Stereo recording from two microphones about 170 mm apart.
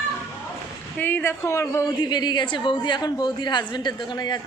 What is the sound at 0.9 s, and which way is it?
A man's voice, 10° left (ahead or behind).